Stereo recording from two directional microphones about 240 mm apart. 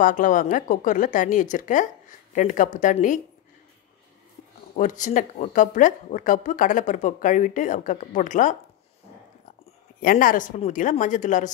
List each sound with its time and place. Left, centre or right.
0.0 s a woman's voice: left
4.7 s a woman's voice: left
9.9 s a woman's voice: left